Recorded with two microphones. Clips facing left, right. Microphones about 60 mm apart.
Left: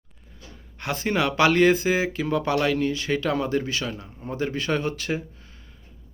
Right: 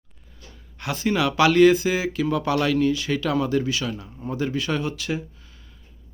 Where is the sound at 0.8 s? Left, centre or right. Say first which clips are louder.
Right 1 dB; left.